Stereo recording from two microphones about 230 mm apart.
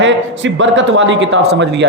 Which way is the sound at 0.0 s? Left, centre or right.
Right.